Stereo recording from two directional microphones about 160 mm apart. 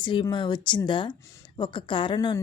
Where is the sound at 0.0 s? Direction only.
30° left (ahead or behind).